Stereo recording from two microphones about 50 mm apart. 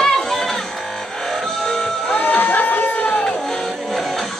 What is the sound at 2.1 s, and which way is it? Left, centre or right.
Crowd, left.